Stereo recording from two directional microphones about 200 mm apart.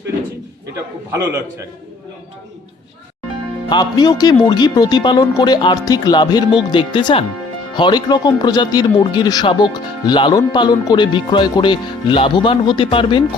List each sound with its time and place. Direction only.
1.1 s a man's voice: 15° right (ahead or behind)
3.7 s speech: 20° left (ahead or behind)